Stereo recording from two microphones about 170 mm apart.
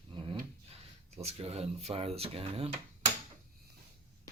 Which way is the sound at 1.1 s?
40° right (ahead or behind).